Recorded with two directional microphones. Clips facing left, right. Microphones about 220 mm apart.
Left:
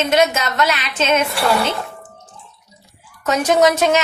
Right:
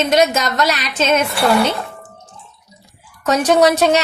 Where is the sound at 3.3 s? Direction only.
35° right (ahead or behind).